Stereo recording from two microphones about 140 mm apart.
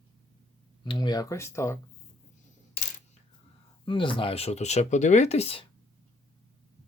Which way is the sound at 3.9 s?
40° left (ahead or behind).